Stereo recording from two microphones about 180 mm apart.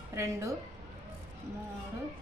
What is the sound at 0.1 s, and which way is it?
Speech, 15° right (ahead or behind).